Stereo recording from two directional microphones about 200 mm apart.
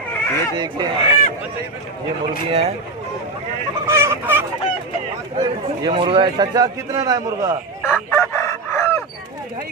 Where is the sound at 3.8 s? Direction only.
15° right (ahead or behind).